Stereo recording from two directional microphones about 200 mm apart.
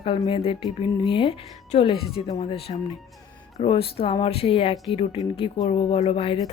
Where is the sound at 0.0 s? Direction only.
25° left (ahead or behind).